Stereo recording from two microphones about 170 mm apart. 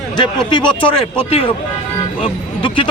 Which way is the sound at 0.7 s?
30° left (ahead or behind).